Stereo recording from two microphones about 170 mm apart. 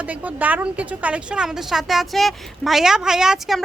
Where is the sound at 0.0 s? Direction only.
10° right (ahead or behind).